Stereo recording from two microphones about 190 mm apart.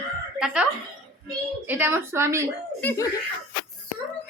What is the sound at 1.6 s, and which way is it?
Speech, 10° right (ahead or behind).